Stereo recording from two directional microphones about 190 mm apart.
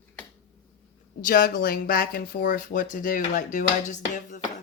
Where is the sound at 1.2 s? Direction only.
45° left (ahead or behind).